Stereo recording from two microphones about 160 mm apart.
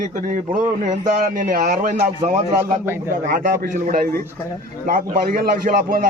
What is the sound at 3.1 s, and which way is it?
A man's voice, 60° right (ahead or behind).